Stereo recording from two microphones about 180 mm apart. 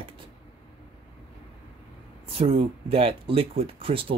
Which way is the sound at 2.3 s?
30° right (ahead or behind).